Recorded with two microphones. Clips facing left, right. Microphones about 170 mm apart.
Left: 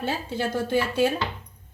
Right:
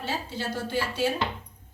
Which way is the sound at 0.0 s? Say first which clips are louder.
Left 5 dB; 55° left (ahead or behind).